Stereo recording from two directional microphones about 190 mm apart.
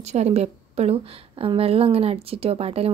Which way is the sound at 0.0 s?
35° right (ahead or behind).